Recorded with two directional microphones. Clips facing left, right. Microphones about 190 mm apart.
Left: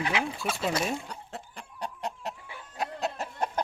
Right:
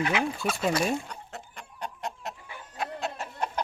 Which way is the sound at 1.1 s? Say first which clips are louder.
Left 1 dB; 30° left (ahead or behind).